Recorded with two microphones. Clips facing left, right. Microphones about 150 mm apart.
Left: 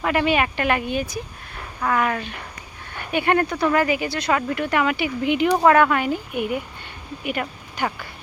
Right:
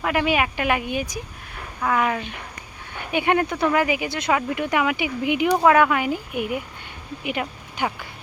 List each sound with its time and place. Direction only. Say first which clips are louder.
0.0 s speech: left 1 dB; 5° right (ahead or behind)